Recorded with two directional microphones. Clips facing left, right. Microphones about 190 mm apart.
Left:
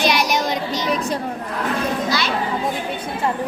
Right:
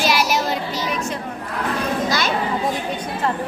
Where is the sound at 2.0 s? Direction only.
45° right (ahead or behind).